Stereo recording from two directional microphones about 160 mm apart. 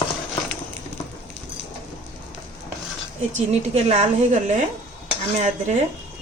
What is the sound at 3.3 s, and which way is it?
Speech, 45° right (ahead or behind).